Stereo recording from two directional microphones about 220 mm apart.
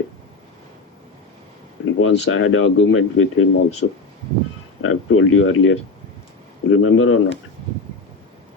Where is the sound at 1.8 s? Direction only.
65° left (ahead or behind).